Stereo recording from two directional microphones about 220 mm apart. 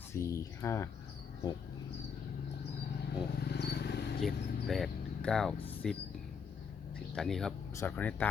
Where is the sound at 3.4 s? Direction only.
50° left (ahead or behind).